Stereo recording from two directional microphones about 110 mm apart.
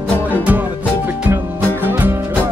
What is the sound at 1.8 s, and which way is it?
Music, 20° right (ahead or behind).